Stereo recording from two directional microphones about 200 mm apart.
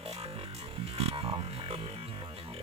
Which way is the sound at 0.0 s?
30° right (ahead or behind).